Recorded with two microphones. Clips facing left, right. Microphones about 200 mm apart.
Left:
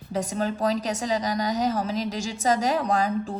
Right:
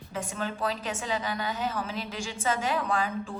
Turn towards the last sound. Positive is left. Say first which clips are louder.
# left 5 dB
turn(degrees=40)  # may be behind; listen again after turning